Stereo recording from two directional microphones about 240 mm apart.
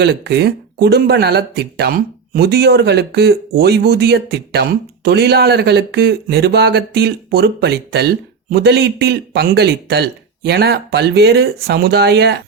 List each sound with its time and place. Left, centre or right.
0.0 s a man's voice: right